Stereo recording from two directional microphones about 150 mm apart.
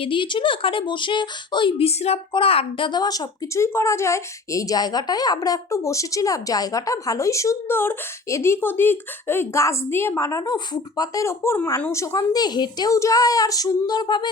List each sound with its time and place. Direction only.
0.0 s speech: 35° left (ahead or behind)